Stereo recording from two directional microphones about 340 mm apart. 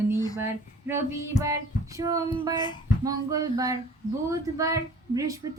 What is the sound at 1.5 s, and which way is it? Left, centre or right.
A woman's voice, centre.